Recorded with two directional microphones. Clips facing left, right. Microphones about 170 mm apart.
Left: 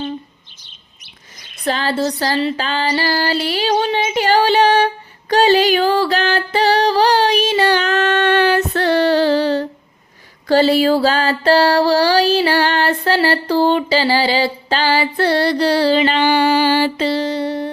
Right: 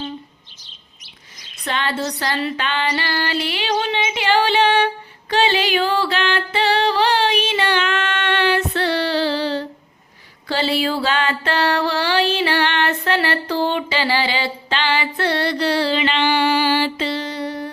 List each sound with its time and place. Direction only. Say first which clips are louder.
0.6 s chirp: even; 55° left (ahead or behind)
1.6 s female singing: left 5 dB; 35° left (ahead or behind)
5.3 s music: left 6 dB; 40° left (ahead or behind)